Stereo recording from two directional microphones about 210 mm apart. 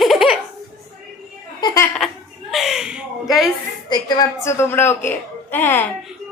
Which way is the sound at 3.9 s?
20° left (ahead or behind).